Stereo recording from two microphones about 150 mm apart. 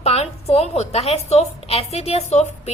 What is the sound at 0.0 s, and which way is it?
A woman's voice, 45° left (ahead or behind).